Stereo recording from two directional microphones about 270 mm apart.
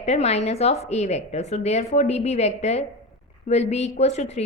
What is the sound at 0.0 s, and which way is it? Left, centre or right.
A woman's voice, left.